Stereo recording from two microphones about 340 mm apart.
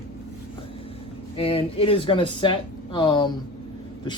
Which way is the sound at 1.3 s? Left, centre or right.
Centre.